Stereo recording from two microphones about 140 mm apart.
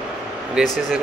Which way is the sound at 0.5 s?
Centre (ahead or behind).